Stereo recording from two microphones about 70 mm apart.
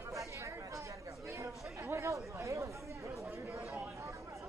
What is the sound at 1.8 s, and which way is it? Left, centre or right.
Chatter, right.